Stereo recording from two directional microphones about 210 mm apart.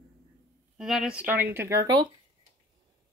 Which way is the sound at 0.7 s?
Centre (ahead or behind).